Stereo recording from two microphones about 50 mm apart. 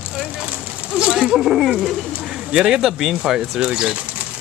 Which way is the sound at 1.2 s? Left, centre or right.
Centre.